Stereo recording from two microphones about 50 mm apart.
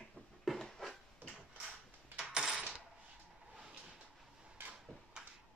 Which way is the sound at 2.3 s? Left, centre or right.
Centre.